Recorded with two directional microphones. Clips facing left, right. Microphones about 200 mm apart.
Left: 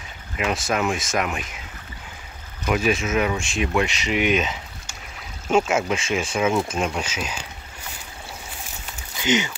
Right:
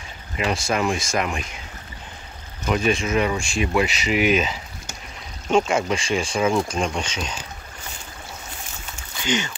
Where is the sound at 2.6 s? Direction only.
5° left (ahead or behind).